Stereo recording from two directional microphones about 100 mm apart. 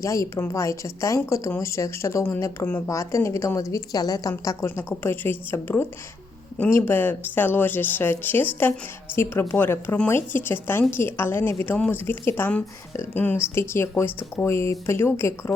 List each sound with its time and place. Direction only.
0.0 s a woman's voice: 30° left (ahead or behind)